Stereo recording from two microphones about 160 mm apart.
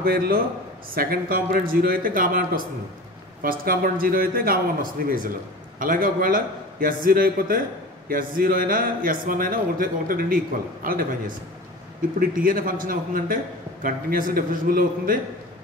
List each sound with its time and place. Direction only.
0.0 s a man's voice: 70° right (ahead or behind)